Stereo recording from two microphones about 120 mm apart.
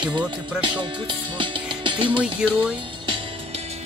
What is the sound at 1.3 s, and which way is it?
Music, 45° right (ahead or behind).